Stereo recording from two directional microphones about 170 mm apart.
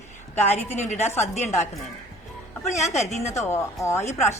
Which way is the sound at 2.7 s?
15° left (ahead or behind).